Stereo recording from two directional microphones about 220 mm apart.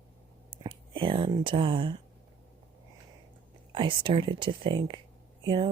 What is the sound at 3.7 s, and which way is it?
Speech, 25° right (ahead or behind).